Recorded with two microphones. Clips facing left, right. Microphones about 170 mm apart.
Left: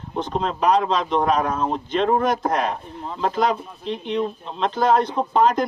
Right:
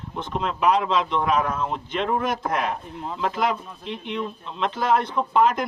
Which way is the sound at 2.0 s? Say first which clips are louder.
Left 5 dB; 50° left (ahead or behind).